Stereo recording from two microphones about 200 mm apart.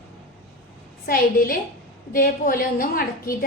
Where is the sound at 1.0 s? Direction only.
45° left (ahead or behind).